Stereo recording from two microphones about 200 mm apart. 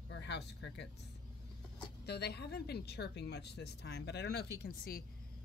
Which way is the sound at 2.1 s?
55° left (ahead or behind).